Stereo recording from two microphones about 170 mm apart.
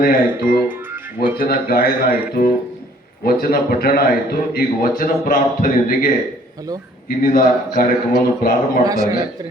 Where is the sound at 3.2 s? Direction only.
60° left (ahead or behind).